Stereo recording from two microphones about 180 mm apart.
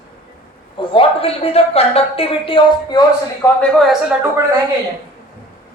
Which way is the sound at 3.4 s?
5° left (ahead or behind).